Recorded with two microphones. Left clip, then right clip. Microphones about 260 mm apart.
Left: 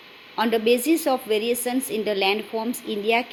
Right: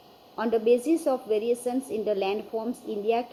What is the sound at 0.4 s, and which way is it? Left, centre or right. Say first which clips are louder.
A woman's voice: left 2 dB; left.